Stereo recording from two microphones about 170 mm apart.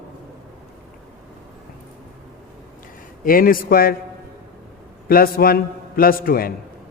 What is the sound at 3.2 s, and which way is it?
Speech, 55° left (ahead or behind).